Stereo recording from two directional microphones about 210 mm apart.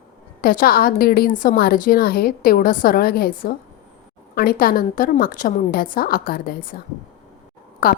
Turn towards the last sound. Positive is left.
turn(degrees=40)  # may be behind; listen again after turning